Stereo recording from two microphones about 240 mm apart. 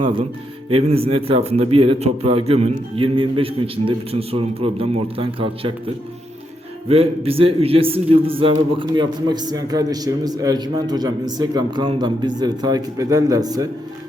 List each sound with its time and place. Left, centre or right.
0.0 s a man's voice: right
6.8 s a man's voice: right